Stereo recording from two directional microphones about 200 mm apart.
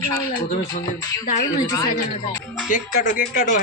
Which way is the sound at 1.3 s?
40° left (ahead or behind).